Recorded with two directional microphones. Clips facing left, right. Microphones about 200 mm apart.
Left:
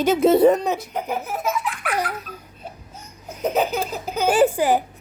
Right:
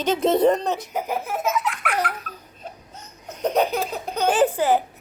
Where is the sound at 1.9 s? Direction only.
10° left (ahead or behind).